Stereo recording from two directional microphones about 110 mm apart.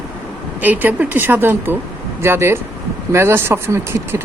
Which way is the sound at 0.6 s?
15° right (ahead or behind).